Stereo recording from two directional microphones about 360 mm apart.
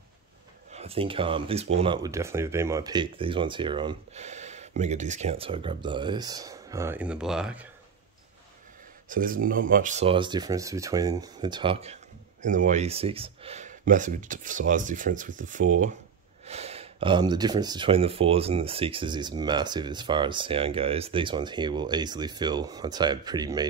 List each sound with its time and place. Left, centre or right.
0.7 s speech: centre
9.1 s speech: right